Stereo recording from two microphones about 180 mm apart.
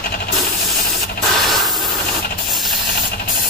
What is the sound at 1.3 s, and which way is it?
Spray, centre (ahead or behind).